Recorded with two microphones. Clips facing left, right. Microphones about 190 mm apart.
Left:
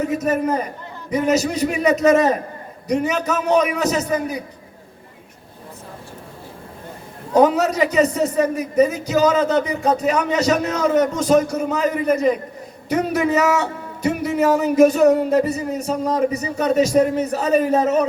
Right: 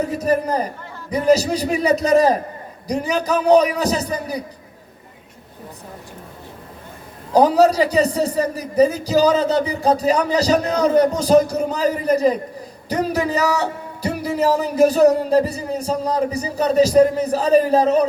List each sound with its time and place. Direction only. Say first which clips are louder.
0.1 s a man's voice: even; 35° right (ahead or behind)
7.3 s a man's voice: right 2 dB; 35° right (ahead or behind)